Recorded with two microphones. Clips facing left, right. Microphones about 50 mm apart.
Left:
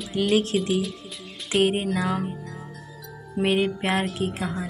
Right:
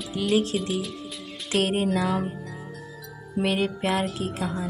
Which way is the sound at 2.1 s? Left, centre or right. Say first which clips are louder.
Right 1 dB; centre.